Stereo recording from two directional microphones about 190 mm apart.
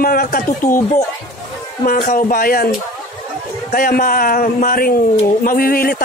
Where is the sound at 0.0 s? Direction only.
50° left (ahead or behind).